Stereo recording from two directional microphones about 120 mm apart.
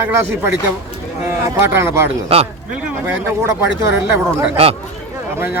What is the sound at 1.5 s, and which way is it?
Speech, 20° right (ahead or behind).